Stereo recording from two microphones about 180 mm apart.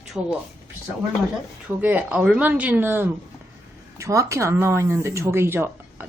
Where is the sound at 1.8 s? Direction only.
10° right (ahead or behind).